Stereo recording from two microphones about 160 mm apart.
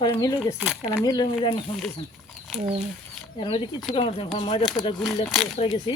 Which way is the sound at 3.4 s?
30° left (ahead or behind).